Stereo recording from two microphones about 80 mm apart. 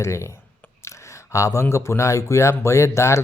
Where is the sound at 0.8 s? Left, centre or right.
Left.